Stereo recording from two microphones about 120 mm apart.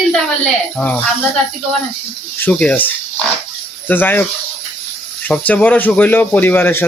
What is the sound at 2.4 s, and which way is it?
Speech, 10° left (ahead or behind).